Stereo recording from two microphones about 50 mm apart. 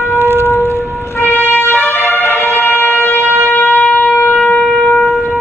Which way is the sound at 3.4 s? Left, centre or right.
Left.